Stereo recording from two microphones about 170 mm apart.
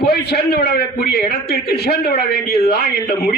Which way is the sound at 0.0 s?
65° left (ahead or behind).